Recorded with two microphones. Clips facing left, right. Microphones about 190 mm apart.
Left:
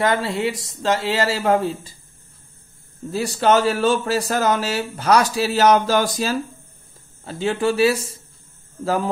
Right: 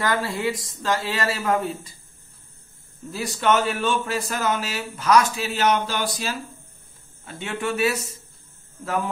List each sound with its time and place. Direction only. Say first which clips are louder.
0.0 s speech: left 4 dB; 25° left (ahead or behind)
3.1 s speech: left 4 dB; 35° left (ahead or behind)
7.2 s speech: left 7 dB; 35° left (ahead or behind)